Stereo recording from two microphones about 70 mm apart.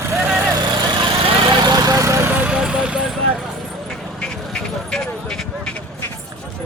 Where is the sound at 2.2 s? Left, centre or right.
Right.